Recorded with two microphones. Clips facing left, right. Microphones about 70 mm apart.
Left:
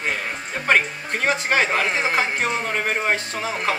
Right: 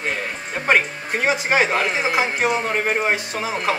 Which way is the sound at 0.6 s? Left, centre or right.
Right.